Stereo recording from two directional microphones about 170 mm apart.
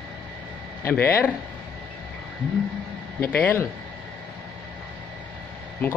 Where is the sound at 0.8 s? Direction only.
10° left (ahead or behind).